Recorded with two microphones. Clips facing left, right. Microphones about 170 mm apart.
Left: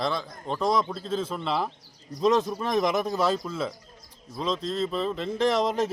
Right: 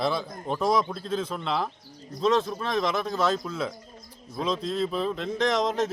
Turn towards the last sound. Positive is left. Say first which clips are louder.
# left 1 dB
turn(degrees=10)  # may be behind; listen again after turning